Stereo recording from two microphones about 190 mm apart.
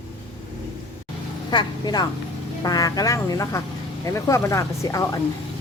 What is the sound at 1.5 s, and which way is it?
A woman's voice, 20° left (ahead or behind).